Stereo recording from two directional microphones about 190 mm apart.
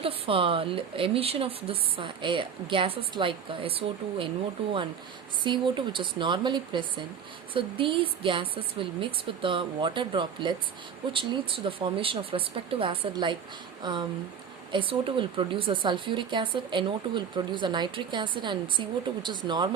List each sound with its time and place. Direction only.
0.0 s speech: 30° right (ahead or behind)